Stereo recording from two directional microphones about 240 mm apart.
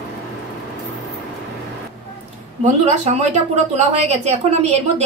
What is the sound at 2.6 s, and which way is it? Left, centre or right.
A woman's voice, right.